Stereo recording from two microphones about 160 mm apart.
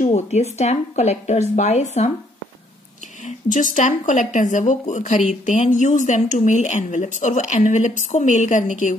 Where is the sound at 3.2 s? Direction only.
55° left (ahead or behind).